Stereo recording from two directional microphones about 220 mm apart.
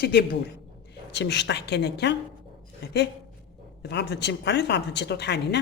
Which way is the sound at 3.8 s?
50° left (ahead or behind).